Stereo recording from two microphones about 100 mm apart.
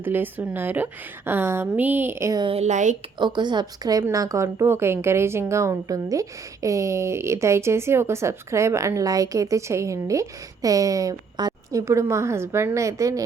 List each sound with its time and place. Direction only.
0.0 s a woman's voice: 20° right (ahead or behind)
3.2 s a woman's voice: 50° right (ahead or behind)